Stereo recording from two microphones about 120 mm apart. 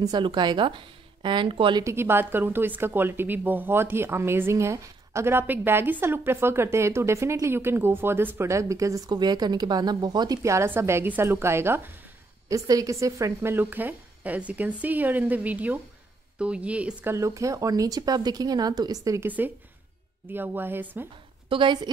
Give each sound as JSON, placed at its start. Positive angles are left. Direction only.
{"t": 0.0, "sound": "speech", "side_deg": -35}
{"t": 1.9, "sound": "a woman's voice", "side_deg": -20}
{"t": 17.1, "sound": "speech", "side_deg": -25}
{"t": 19.2, "sound": "a woman's voice", "side_deg": -15}
{"t": 21.5, "sound": "a woman's voice", "side_deg": -45}